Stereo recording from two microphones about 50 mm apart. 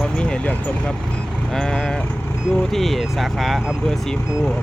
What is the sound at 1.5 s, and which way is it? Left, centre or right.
Speech, centre.